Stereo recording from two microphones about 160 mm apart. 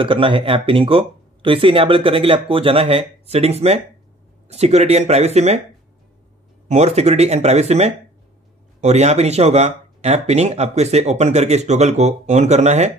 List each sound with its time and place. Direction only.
0.0 s speech: 30° right (ahead or behind)
6.7 s speech: 45° right (ahead or behind)